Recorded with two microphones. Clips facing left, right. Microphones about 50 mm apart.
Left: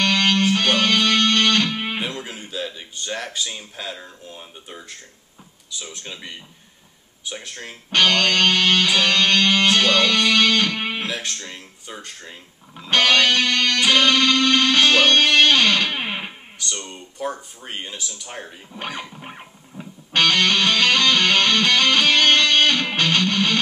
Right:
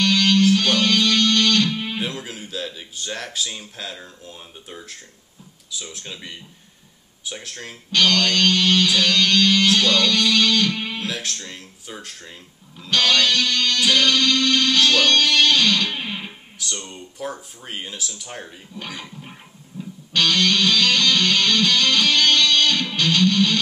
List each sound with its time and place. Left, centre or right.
0.0 s music: left
2.0 s speech: centre
7.9 s music: left
11.1 s speech: centre
12.9 s music: left
16.8 s speech: centre
18.7 s speech: left
19.8 s music: left